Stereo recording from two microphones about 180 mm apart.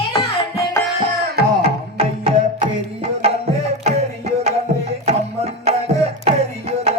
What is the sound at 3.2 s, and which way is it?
Music, 35° right (ahead or behind).